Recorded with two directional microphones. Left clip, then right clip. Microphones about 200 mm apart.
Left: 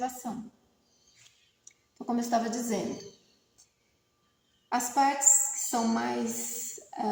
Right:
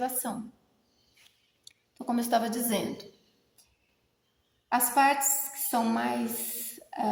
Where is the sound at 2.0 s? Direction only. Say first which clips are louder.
Right 2 dB; 40° right (ahead or behind).